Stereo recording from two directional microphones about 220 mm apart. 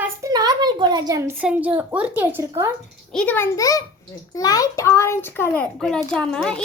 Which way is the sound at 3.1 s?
5° left (ahead or behind).